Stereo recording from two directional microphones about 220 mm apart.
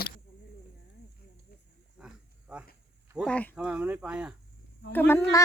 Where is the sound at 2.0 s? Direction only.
5° right (ahead or behind).